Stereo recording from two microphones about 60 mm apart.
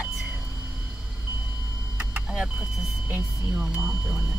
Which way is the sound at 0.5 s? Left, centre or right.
Centre.